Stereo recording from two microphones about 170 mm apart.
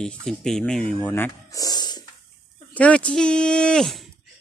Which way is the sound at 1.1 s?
10° left (ahead or behind).